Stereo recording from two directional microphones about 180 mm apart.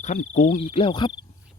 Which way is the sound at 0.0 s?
40° left (ahead or behind).